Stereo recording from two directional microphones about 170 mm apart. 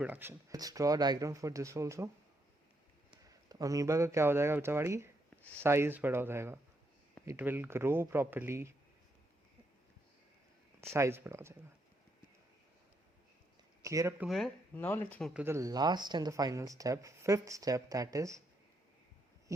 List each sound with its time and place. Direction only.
0.0 s speech: 10° right (ahead or behind)
3.2 s speech: 20° right (ahead or behind)
10.9 s speech: 15° right (ahead or behind)
13.8 s speech: 20° right (ahead or behind)
14.2 s speech: centre (ahead or behind)
14.8 s speech: 10° left (ahead or behind)
15.2 s speech: 5° right (ahead or behind)
19.5 s a sound: 20° right (ahead or behind)